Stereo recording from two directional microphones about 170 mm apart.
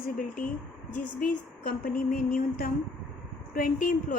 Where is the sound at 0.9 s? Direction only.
55° left (ahead or behind).